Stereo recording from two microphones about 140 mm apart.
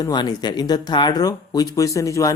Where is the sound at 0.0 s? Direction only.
30° left (ahead or behind).